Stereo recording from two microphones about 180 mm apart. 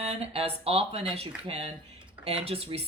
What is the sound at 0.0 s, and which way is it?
Speech, 35° right (ahead or behind).